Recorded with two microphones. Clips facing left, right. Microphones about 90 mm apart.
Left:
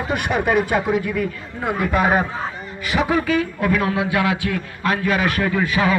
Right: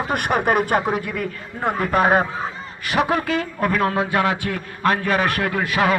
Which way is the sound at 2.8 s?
50° right (ahead or behind).